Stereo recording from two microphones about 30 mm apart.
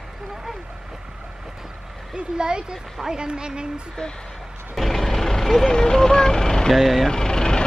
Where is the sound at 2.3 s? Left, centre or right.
Right.